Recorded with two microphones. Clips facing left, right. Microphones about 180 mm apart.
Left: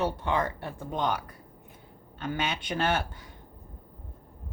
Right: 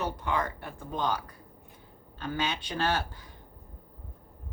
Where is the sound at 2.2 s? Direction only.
20° left (ahead or behind).